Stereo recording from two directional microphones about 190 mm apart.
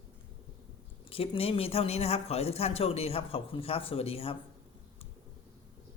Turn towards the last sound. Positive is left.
turn(degrees=30)  # may be behind; listen again after turning